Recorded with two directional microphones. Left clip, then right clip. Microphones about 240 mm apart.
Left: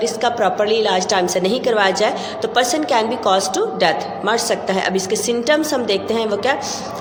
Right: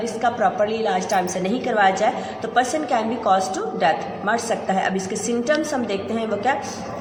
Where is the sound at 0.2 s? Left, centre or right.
Left.